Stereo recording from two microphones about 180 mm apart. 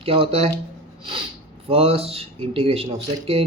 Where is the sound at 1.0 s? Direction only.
30° right (ahead or behind).